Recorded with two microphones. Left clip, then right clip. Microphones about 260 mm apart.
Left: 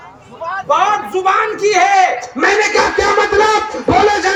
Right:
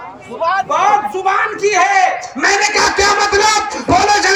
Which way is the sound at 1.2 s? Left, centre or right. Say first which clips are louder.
Left 1 dB; centre.